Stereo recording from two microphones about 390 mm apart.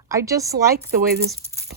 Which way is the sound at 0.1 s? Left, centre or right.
Centre.